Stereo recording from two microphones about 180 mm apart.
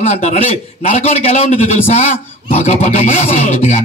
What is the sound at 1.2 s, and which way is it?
Speech, 40° left (ahead or behind).